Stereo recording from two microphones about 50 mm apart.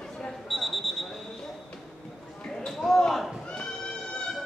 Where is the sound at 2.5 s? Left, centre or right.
Centre.